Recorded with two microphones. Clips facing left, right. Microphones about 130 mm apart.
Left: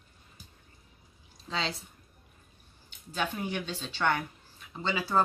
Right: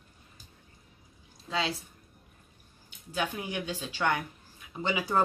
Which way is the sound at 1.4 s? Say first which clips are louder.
Right 2 dB; 10° right (ahead or behind).